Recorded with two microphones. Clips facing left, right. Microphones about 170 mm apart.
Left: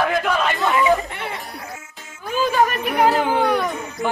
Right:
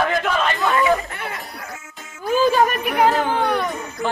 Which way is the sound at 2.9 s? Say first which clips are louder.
Even; 5° left (ahead or behind).